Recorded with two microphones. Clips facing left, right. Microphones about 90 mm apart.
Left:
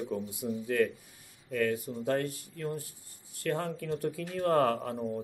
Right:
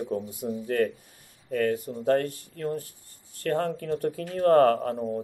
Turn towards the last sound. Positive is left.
turn(degrees=-45)  # may be behind; listen again after turning